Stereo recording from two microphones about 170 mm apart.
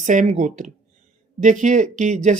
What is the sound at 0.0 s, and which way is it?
Speech, 50° right (ahead or behind).